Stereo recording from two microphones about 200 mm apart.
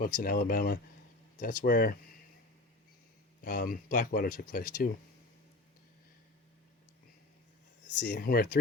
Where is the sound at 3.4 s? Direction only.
45° left (ahead or behind).